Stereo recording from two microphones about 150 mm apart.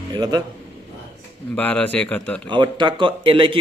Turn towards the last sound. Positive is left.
turn(degrees=-35)  # may be behind; listen again after turning